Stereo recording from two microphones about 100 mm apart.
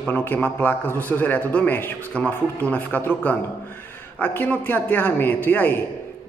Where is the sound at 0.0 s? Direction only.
20° left (ahead or behind).